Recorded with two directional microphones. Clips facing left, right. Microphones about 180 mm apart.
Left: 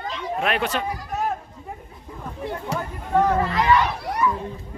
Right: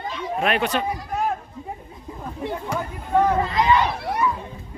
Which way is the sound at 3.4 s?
20° right (ahead or behind).